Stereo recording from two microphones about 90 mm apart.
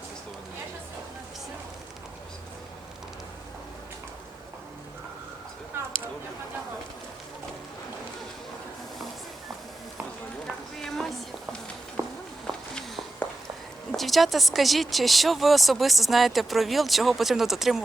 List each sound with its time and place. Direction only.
10.4 s run: 5° left (ahead or behind)
12.0 s walk: 40° right (ahead or behind)
12.5 s a sound: 10° left (ahead or behind)
13.9 s speech: centre (ahead or behind)